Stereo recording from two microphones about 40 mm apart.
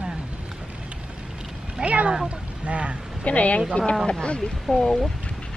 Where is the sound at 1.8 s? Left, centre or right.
Right.